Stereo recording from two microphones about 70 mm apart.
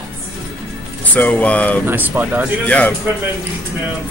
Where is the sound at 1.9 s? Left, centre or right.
Right.